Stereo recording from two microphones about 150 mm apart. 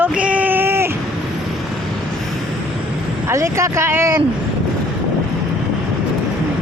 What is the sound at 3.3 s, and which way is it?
Speech, 20° right (ahead or behind).